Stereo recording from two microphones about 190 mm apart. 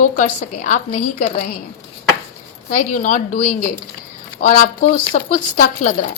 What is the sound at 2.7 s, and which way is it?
Speech, 45° left (ahead or behind).